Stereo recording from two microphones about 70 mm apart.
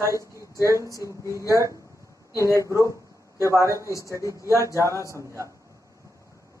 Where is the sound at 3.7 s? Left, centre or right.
Left.